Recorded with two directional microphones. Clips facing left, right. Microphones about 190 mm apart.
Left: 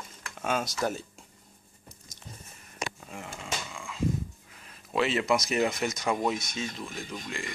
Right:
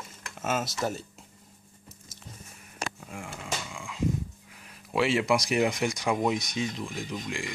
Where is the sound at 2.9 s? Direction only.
5° right (ahead or behind).